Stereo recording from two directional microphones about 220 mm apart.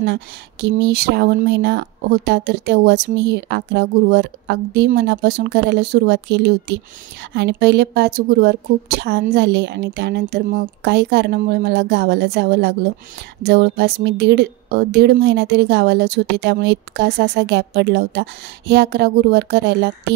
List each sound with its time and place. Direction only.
0.0 s speech: 50° right (ahead or behind)